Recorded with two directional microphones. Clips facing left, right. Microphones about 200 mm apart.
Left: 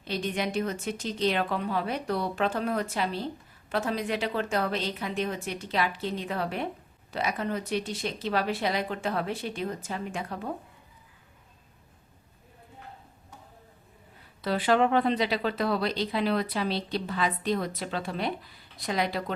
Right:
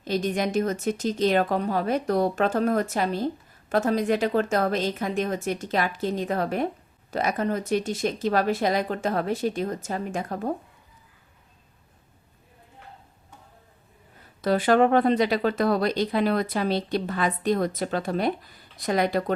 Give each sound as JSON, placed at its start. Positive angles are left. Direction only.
{"t": 0.0, "sound": "speech", "side_deg": -45}
{"t": 14.4, "sound": "speech", "side_deg": -45}